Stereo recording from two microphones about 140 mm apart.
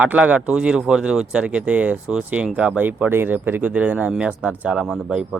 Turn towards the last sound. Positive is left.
turn(degrees=-5)  # may be behind; listen again after turning